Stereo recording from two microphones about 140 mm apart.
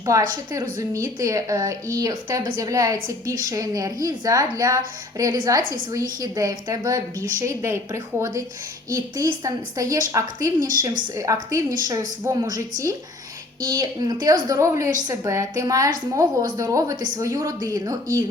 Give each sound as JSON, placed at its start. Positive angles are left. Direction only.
{"t": 0.0, "sound": "a woman's voice", "side_deg": -20}
{"t": 13.7, "sound": "a woman's voice", "side_deg": -25}